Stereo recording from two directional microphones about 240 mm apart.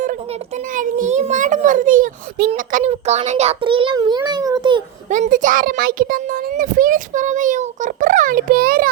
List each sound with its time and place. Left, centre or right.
0.8 s a child's voice: right
5.1 s a child's voice: right